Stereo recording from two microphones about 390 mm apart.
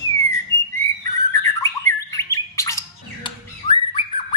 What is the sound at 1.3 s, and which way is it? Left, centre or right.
Bird, centre.